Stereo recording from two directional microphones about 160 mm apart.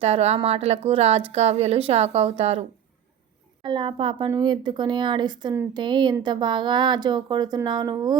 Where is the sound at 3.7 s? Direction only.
30° right (ahead or behind).